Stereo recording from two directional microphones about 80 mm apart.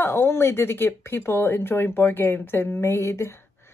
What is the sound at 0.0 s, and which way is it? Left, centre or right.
Speech, left.